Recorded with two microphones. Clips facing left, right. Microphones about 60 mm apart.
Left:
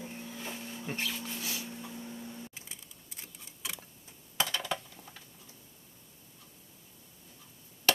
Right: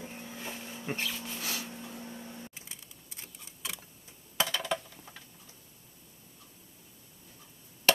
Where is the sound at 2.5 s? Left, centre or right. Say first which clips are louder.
Even; centre.